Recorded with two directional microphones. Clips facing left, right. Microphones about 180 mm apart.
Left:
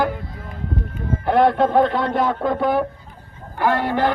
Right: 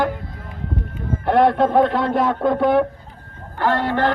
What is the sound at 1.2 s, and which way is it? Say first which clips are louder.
Speech: right 1 dB; centre (ahead or behind).